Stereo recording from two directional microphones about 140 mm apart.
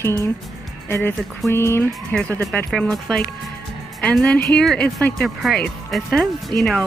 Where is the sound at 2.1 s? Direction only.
10° left (ahead or behind).